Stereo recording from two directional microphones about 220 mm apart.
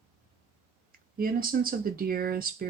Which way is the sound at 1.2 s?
40° right (ahead or behind).